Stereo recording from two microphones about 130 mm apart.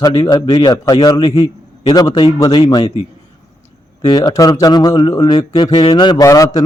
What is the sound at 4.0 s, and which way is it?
Speech, 35° left (ahead or behind).